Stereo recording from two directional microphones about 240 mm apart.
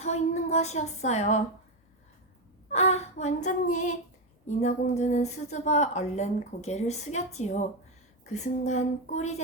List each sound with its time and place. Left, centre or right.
0.0 s speech: left
2.7 s a woman's voice: left